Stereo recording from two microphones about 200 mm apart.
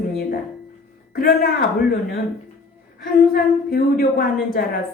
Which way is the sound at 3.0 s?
45° left (ahead or behind).